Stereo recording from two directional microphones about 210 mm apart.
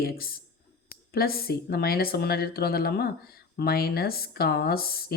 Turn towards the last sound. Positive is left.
turn(degrees=45)  # may be behind; listen again after turning